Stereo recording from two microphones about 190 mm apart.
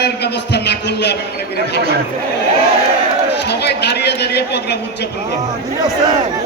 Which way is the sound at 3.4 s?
60° left (ahead or behind).